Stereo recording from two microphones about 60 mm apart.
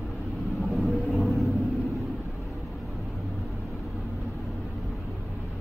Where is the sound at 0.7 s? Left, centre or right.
Centre.